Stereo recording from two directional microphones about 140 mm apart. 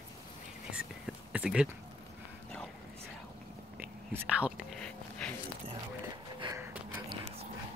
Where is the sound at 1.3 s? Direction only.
5° right (ahead or behind).